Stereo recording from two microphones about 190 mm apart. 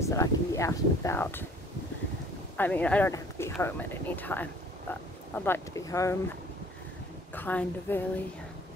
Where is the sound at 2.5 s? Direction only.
10° left (ahead or behind).